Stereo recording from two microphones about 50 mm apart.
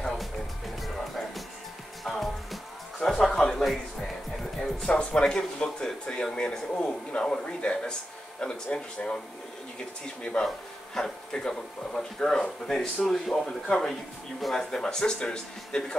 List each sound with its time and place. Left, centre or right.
0.8 s music: centre
4.6 s speech: centre